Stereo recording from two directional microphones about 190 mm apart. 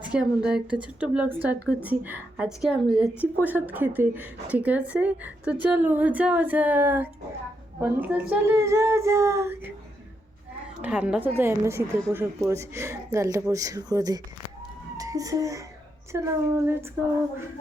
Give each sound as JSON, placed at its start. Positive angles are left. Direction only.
{"t": 0.0, "sound": "a woman's voice", "side_deg": -5}
{"t": 10.8, "sound": "a woman's voice", "side_deg": -5}